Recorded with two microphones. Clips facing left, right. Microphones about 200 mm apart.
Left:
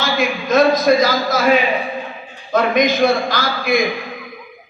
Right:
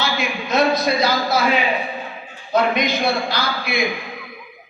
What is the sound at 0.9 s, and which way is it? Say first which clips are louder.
Speech: left 5 dB; 45° left (ahead or behind).